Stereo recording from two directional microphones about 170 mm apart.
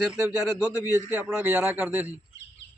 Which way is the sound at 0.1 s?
5° right (ahead or behind).